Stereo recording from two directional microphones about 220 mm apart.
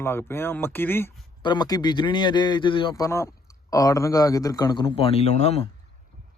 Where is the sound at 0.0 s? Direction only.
10° left (ahead or behind); by 5.6 s 30° left (ahead or behind).